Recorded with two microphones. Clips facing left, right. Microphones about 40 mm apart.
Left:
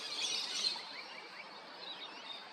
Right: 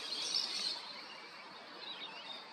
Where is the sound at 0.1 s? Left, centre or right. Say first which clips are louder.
Left 2 dB; left.